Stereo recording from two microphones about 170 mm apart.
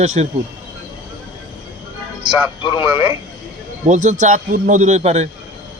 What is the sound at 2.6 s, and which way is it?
Speech, 30° left (ahead or behind).